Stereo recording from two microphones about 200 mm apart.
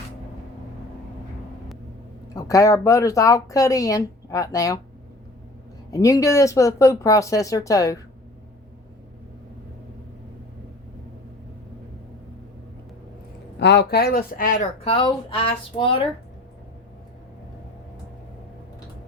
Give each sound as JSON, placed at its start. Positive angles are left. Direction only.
{"t": 2.3, "sound": "speech", "side_deg": 15}
{"t": 5.9, "sound": "speech", "side_deg": 15}
{"t": 13.6, "sound": "speech", "side_deg": 60}